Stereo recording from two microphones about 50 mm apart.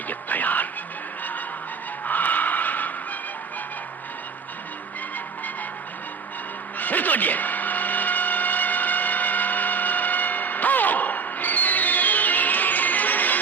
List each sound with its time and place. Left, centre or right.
0.1 s music: left
2.0 s music: left
6.7 s a sound: left